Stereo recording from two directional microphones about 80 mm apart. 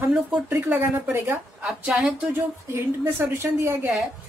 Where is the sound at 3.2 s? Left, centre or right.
Right.